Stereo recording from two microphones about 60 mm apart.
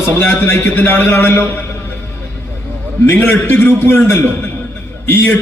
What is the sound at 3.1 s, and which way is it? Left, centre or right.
A man's voice, left.